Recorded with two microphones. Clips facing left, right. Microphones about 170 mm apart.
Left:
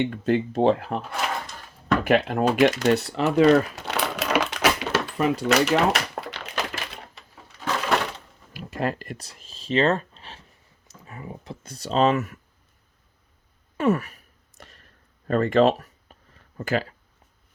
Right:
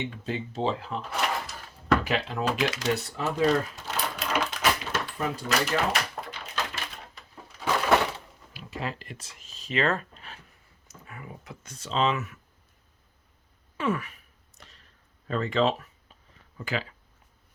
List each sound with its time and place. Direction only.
0.0 s speech: 60° left (ahead or behind)
1.1 s drawer open or close: centre (ahead or behind)
2.0 s speech: 55° left (ahead or behind)
2.6 s typewriter: 55° left (ahead or behind); by 7.0 s 75° left (ahead or behind)
8.5 s speech: 50° left (ahead or behind)
13.7 s sigh: 45° left (ahead or behind)
14.6 s a sound: 50° left (ahead or behind)
15.3 s speech: 50° left (ahead or behind)